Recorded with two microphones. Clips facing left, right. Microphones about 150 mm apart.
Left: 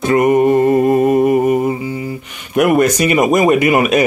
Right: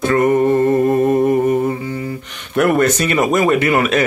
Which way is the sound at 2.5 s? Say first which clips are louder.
Left 2 dB; 10° left (ahead or behind).